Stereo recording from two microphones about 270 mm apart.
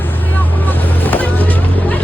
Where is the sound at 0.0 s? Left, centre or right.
Centre.